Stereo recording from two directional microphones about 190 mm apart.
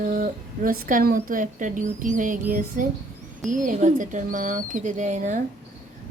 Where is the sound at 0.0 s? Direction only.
45° right (ahead or behind).